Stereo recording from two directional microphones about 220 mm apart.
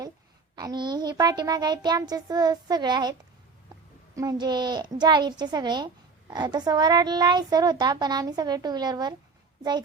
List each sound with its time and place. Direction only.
0.5 s a child's voice: 20° right (ahead or behind)